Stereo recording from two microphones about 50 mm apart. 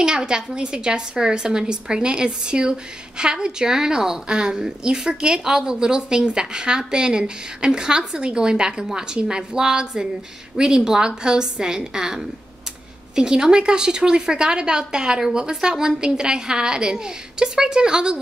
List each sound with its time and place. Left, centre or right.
0.0 s a woman's voice: centre